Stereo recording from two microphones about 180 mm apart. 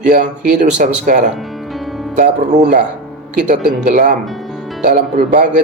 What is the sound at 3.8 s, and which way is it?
Speech, 45° right (ahead or behind).